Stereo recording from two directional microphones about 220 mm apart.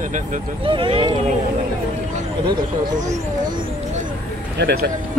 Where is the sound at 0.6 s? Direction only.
25° right (ahead or behind).